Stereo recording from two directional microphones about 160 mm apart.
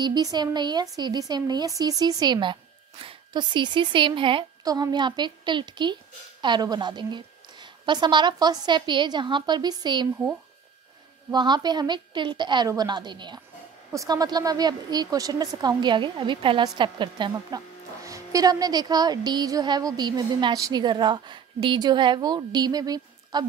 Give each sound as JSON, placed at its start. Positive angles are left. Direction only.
{"t": 0.0, "sound": "speech", "side_deg": -25}
{"t": 11.3, "sound": "speech", "side_deg": -25}